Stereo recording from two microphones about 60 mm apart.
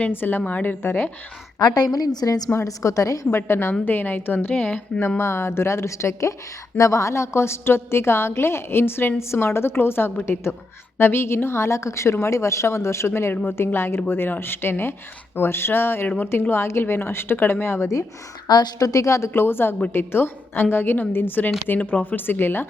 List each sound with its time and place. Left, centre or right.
0.1 s a woman's voice: left
1.5 s a woman's voice: left
2.6 s a woman's voice: left
3.2 s a woman's voice: left
5.0 s a woman's voice: left
13.3 s a woman's voice: left
13.7 s a woman's voice: left
16.0 s a woman's voice: left
16.5 s a woman's voice: left
18.8 s a woman's voice: left
19.3 s a woman's voice: left